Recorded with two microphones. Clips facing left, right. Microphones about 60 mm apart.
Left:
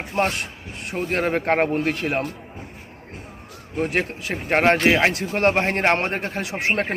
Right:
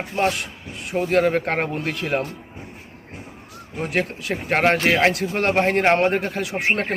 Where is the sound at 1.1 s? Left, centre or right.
Left.